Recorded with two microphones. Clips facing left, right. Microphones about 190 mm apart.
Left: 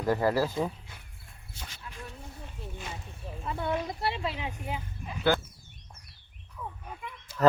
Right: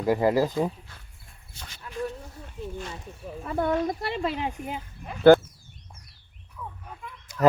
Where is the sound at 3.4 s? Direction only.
50° right (ahead or behind).